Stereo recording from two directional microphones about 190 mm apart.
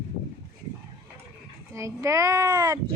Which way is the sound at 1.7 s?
15° right (ahead or behind).